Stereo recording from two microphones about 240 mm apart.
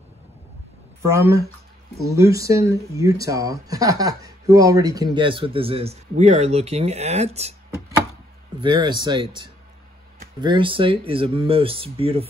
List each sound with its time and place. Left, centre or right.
1.0 s speech: centre; by 7.5 s right
8.5 s speech: centre